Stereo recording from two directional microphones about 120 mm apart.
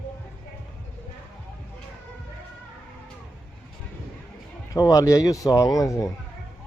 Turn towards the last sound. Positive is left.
turn(degrees=30)  # may be behind; listen again after turning